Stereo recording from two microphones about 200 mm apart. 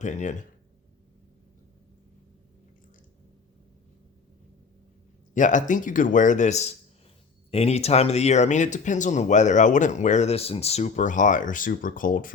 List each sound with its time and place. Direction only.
0.0 s speech: 35° left (ahead or behind)
5.3 s speech: 40° left (ahead or behind)